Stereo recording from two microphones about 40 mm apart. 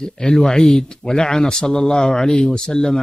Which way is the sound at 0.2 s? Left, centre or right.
Centre.